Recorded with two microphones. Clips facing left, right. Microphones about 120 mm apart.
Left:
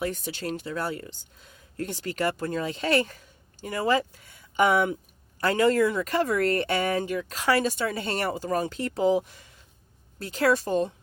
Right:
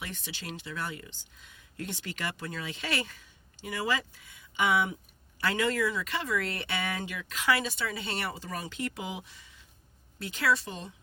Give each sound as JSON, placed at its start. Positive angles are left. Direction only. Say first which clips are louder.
{"t": 0.0, "sound": "speech", "louder": "left 11 dB", "side_deg": 40}